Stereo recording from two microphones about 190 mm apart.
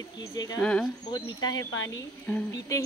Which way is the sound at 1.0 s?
25° left (ahead or behind).